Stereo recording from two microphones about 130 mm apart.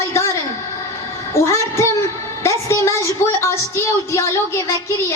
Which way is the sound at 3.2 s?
20° left (ahead or behind).